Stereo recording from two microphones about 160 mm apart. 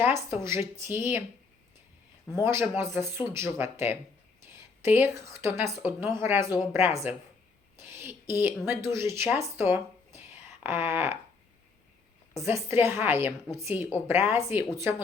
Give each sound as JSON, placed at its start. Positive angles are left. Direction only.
{"t": 0.0, "sound": "a woman's voice", "side_deg": -15}
{"t": 2.3, "sound": "a woman's voice", "side_deg": -15}
{"t": 12.3, "sound": "a woman's voice", "side_deg": -20}